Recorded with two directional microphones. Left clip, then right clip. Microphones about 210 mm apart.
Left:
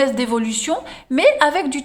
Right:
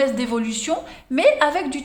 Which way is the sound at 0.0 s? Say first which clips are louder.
Left 3 dB; 25° left (ahead or behind).